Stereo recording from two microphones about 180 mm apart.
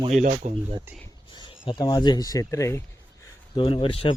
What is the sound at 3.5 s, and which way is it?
Speech, 30° left (ahead or behind).